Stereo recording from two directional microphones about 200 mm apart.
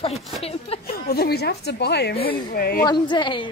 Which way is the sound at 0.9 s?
50° left (ahead or behind).